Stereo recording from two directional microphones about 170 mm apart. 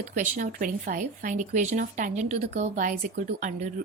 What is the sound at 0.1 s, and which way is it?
Speech, 50° right (ahead or behind).